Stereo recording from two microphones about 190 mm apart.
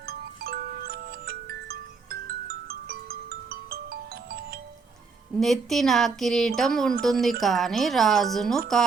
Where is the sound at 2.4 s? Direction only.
55° right (ahead or behind).